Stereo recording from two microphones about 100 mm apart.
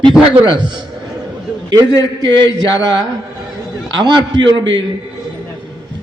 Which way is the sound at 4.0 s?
45° right (ahead or behind).